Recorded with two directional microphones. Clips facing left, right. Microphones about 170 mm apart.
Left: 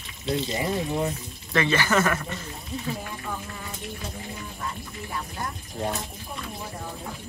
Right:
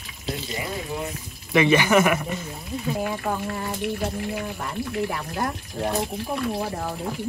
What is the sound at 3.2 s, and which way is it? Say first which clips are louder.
Speech: right 8 dB; 75° right (ahead or behind).